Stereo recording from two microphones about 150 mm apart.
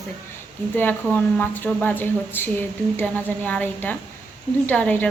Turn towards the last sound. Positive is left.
turn(degrees=10)  # may be behind; listen again after turning